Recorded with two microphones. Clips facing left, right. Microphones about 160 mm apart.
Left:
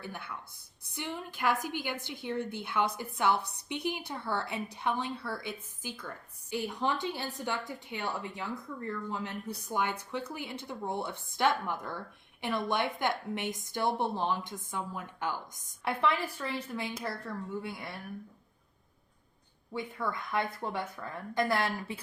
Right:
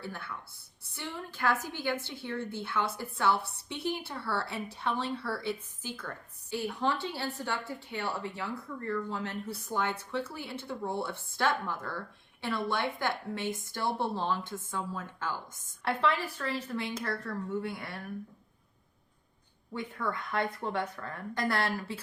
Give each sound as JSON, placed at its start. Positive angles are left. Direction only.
{"t": 0.0, "sound": "speech", "side_deg": 15}
{"t": 19.7, "sound": "speech", "side_deg": 10}